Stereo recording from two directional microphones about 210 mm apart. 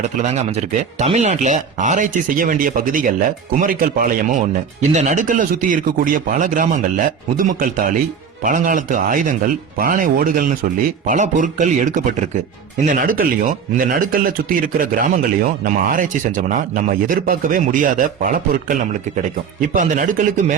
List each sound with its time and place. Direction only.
0.2 s speech: 30° right (ahead or behind)
19.7 s speech: 40° right (ahead or behind)